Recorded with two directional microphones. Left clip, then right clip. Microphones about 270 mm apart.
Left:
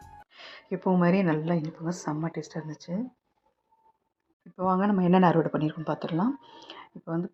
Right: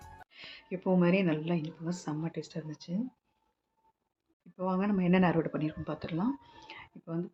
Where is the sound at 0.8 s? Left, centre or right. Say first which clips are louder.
Left 3 dB; centre.